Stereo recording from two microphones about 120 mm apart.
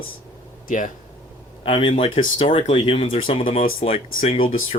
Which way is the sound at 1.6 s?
50° left (ahead or behind).